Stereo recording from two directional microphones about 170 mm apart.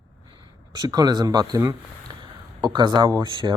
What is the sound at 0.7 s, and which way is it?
Speech, 20° right (ahead or behind).